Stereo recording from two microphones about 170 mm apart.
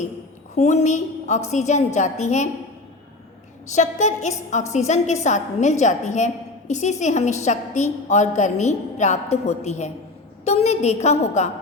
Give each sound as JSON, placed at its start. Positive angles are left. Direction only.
{"t": 0.5, "sound": "a woman's voice", "side_deg": 40}
{"t": 3.8, "sound": "a woman's voice", "side_deg": 45}